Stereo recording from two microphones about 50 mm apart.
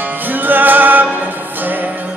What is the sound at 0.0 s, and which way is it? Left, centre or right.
Music, right.